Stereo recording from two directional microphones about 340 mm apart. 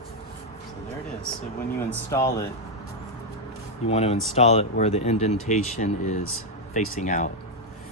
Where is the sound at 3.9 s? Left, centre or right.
Centre.